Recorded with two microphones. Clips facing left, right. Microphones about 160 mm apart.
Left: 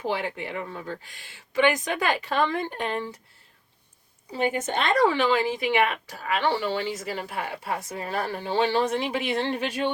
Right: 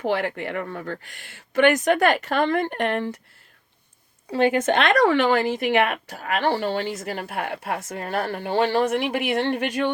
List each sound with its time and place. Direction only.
0.0 s a woman's voice: 65° right (ahead or behind)
4.3 s a woman's voice: 90° right; by 9.9 s 60° right (ahead or behind)